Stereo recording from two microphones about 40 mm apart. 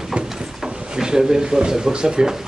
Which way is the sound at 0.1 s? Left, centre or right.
Right.